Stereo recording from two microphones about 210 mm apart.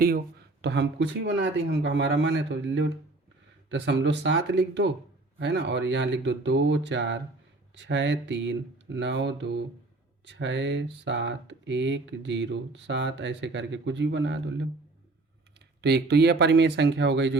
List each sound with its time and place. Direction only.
0.0 s speech: 45° right (ahead or behind)